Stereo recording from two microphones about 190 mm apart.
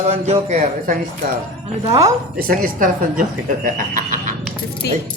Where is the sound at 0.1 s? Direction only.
35° right (ahead or behind).